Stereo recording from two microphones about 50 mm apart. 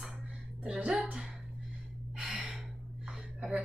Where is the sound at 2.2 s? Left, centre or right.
Right.